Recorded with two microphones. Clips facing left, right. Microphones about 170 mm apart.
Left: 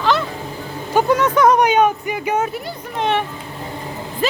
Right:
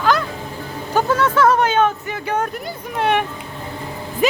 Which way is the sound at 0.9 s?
15° left (ahead or behind).